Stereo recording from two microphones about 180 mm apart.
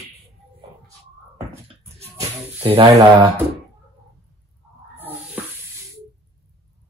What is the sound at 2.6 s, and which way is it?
Speech, 30° right (ahead or behind).